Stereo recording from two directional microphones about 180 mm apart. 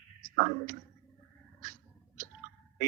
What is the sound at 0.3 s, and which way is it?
Speech, 50° right (ahead or behind).